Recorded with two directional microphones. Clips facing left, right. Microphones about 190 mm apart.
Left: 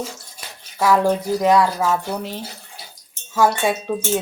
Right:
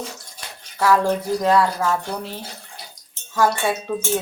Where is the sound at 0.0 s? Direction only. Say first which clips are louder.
Left 3 dB; 10° left (ahead or behind).